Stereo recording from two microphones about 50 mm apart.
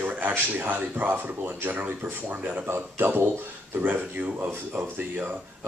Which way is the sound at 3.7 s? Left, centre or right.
Right.